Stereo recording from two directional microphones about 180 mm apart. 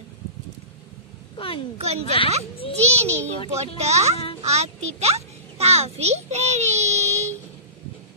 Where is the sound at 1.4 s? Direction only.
30° left (ahead or behind).